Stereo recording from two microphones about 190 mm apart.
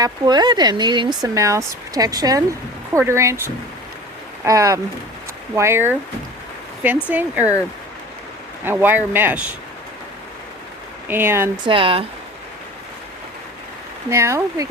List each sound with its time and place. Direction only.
0.0 s speech: 20° right (ahead or behind)
8.6 s speech: 10° right (ahead or behind)
11.1 s speech: 10° right (ahead or behind)
11.6 s speech: 30° right (ahead or behind)
14.1 s speech: 15° right (ahead or behind)